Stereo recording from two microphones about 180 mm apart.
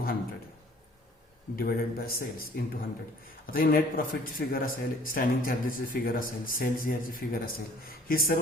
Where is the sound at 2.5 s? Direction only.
55° left (ahead or behind).